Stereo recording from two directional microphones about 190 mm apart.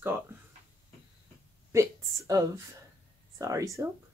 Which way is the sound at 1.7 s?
15° right (ahead or behind).